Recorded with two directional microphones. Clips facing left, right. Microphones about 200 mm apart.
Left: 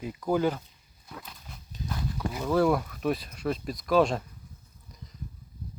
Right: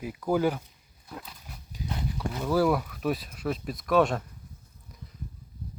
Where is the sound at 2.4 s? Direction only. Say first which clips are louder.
Even; 5° right (ahead or behind).